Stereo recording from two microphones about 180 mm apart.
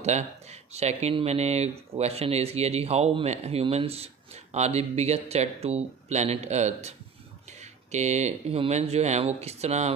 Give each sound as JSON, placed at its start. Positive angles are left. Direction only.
{"t": 0.7, "sound": "speech", "side_deg": -35}